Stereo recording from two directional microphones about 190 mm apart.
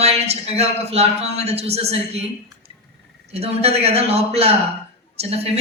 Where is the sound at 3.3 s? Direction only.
30° right (ahead or behind).